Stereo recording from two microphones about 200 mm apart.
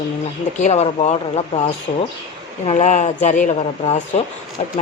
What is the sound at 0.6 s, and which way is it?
Speech, 35° left (ahead or behind).